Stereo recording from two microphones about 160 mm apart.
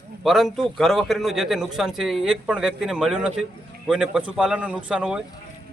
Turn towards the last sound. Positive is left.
turn(degrees=-5)  # may be behind; listen again after turning